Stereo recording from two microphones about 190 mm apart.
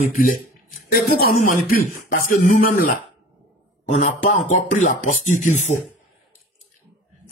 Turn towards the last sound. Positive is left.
turn(degrees=40)  # may be behind; listen again after turning